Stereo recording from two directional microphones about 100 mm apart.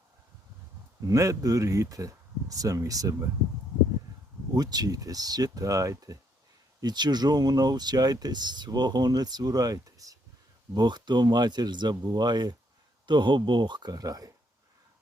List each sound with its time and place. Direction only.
1.0 s speech: 35° right (ahead or behind)
4.5 s speech: 40° right (ahead or behind)
6.8 s speech: 45° right (ahead or behind)
10.8 s speech: 45° right (ahead or behind)